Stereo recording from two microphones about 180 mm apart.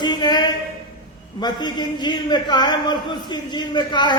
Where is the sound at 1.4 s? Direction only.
25° left (ahead or behind).